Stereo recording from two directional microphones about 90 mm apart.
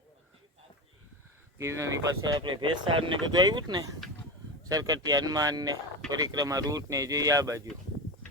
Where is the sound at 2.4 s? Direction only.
60° right (ahead or behind).